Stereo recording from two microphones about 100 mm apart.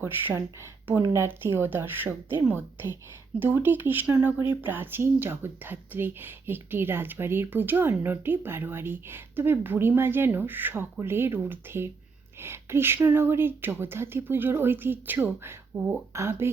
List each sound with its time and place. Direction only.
0.0 s speech: 25° right (ahead or behind)